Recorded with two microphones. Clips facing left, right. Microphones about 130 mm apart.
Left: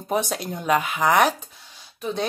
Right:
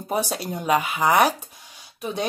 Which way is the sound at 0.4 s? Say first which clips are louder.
Even; 10° right (ahead or behind).